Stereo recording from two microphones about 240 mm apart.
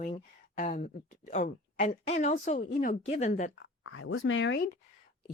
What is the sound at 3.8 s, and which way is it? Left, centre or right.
Speech, left.